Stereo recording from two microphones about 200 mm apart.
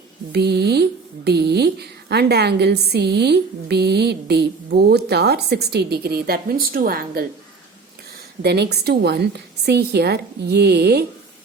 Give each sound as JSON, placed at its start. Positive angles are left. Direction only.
{"t": 0.3, "sound": "speech", "side_deg": -55}
{"t": 8.4, "sound": "speech", "side_deg": -55}